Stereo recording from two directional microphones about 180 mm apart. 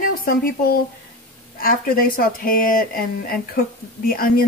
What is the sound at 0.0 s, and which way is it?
A woman's voice, 55° left (ahead or behind).